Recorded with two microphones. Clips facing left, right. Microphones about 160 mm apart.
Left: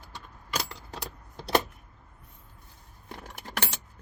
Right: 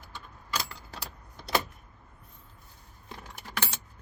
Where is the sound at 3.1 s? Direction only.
55° left (ahead or behind).